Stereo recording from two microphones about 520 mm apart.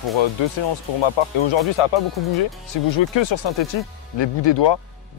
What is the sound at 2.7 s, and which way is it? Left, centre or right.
Speech, left.